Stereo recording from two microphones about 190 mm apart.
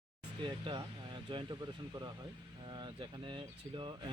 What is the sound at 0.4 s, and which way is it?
Speech, 25° right (ahead or behind).